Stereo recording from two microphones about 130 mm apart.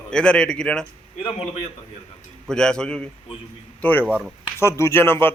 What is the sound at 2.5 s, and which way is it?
A man's voice, 5° left (ahead or behind).